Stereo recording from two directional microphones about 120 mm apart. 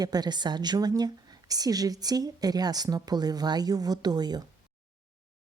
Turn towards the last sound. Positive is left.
turn(degrees=-35)  # may be behind; listen again after turning